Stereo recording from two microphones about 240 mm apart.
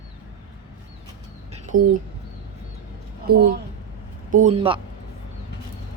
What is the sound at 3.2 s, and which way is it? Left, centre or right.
A woman's voice, right.